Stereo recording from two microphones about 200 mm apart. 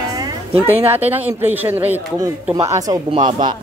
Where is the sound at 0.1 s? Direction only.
20° right (ahead or behind).